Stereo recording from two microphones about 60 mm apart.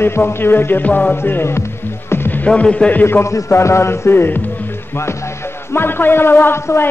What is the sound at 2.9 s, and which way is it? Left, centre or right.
Music, left.